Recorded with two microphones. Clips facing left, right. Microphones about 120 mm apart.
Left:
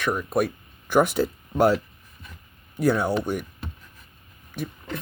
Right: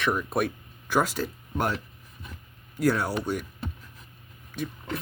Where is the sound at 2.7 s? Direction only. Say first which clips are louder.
Left 3 dB; 20° left (ahead or behind).